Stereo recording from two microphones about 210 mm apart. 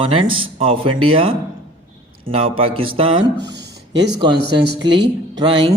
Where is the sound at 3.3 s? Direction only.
55° right (ahead or behind).